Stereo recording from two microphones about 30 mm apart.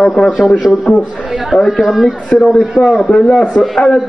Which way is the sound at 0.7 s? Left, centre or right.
Left.